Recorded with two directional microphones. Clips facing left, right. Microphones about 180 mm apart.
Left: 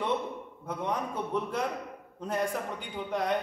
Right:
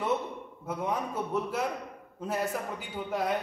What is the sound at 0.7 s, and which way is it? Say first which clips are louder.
A man's voice: right 1 dB; 5° right (ahead or behind).